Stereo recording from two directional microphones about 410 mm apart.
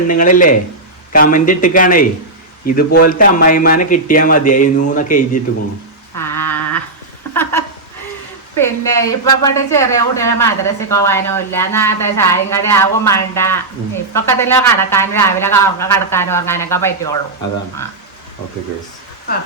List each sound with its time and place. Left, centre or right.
0.1 s speech: centre
6.1 s a sound: centre
8.5 s speech: centre